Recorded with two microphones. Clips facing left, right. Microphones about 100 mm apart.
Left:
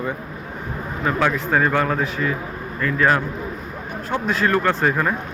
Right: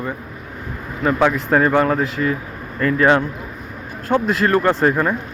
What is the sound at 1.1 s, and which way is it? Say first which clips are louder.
Speech: right 3 dB; 15° right (ahead or behind).